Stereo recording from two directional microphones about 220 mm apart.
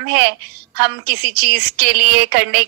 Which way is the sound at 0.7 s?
50° right (ahead or behind).